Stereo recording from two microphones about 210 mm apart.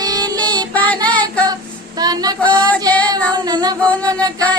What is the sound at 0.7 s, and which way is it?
Child singing, 5° left (ahead or behind).